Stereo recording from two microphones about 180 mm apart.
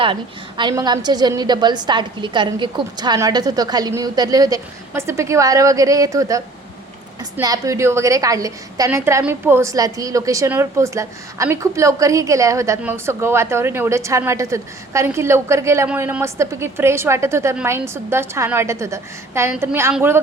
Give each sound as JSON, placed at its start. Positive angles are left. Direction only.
{"t": 0.0, "sound": "a woman's voice", "side_deg": -25}
{"t": 7.4, "sound": "a woman's voice", "side_deg": -20}